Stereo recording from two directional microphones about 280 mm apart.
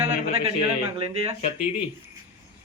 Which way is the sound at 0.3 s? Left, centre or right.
Right.